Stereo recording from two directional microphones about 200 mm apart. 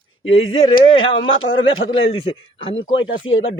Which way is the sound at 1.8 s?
25° left (ahead or behind).